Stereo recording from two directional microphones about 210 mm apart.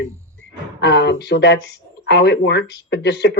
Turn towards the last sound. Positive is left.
turn(degrees=55)  # may be behind; listen again after turning